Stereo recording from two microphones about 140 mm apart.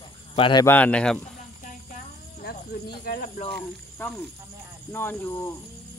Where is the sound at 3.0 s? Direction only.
80° left.